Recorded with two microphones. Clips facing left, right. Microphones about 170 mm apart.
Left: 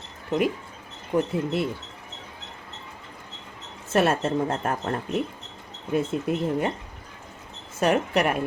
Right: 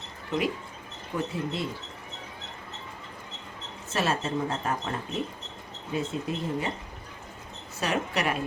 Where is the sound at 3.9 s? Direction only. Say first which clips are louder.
Left 6 dB; 55° left (ahead or behind).